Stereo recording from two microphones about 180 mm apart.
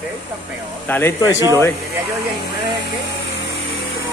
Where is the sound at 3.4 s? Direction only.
85° left.